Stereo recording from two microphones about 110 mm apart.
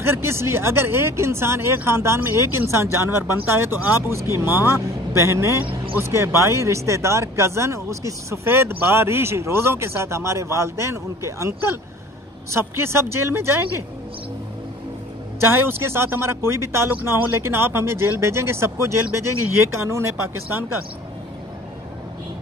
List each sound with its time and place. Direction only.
0.0 s speech: 25° right (ahead or behind)
15.5 s speech: 20° right (ahead or behind)